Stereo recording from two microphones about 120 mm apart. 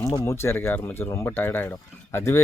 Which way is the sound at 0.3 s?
20° left (ahead or behind).